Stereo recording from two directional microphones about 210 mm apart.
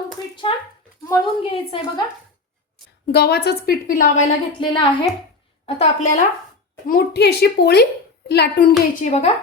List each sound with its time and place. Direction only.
0.4 s a woman's voice: 25° left (ahead or behind)
3.1 s a woman's voice: 50° left (ahead or behind)
4.6 s a woman's voice: 20° left (ahead or behind)
5.6 s a woman's voice: 30° left (ahead or behind)
6.8 s a woman's voice: 45° left (ahead or behind)
9.0 s a woman's voice: 35° left (ahead or behind)